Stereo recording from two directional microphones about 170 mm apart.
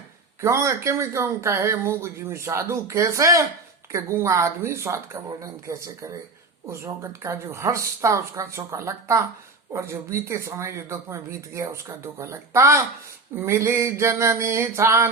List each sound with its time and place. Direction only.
0.4 s speech: 15° right (ahead or behind)